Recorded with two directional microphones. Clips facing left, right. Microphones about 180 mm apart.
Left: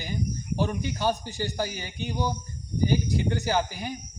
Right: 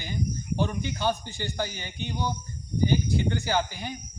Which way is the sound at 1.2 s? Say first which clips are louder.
Left 4 dB; 40° left (ahead or behind).